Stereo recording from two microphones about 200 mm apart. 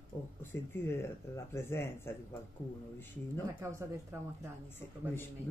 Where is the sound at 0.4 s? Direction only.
10° left (ahead or behind).